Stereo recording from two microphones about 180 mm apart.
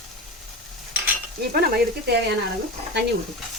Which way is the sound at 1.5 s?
60° right (ahead or behind).